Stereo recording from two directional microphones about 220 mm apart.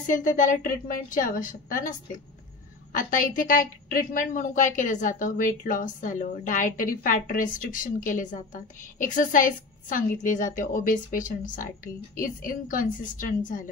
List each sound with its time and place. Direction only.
0.0 s a woman's voice: 35° left (ahead or behind)